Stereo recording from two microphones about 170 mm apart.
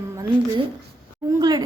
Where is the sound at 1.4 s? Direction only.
20° right (ahead or behind).